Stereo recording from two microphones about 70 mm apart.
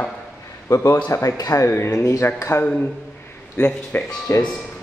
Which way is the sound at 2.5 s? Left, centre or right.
Left.